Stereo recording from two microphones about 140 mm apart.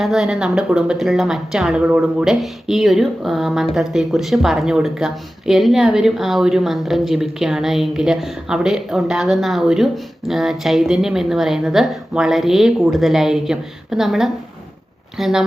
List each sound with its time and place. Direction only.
0.0 s speech: 5° right (ahead or behind)